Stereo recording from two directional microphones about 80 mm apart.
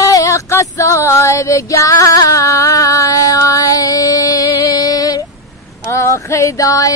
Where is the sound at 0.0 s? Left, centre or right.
Left.